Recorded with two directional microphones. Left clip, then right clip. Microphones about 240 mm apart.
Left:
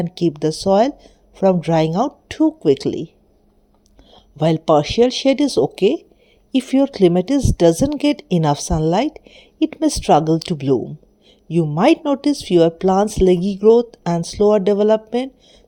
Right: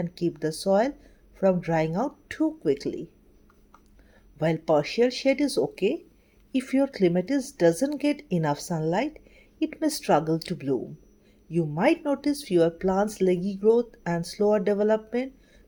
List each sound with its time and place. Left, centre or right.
0.0 s speech: left
4.1 s speech: left